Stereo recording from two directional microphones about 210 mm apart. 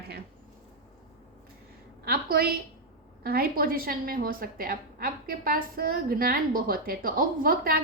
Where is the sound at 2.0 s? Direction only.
45° right (ahead or behind).